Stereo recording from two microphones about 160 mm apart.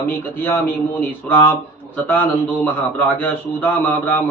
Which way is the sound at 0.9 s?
15° left (ahead or behind).